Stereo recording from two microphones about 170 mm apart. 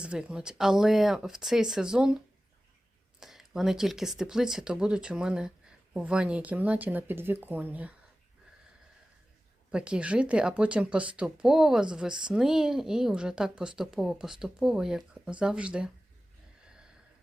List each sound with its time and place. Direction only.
0.0 s speech: 5° right (ahead or behind)
9.7 s speech: 5° right (ahead or behind)